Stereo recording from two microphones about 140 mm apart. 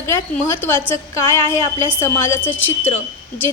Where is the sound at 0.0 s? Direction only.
20° left (ahead or behind).